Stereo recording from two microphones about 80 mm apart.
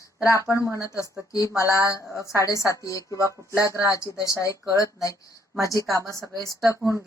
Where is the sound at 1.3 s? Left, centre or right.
Left.